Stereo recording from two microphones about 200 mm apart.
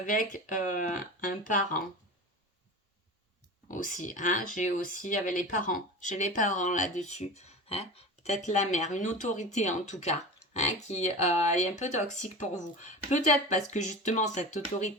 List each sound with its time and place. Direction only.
0.0 s speech: 40° left (ahead or behind)
3.7 s speech: 40° left (ahead or behind)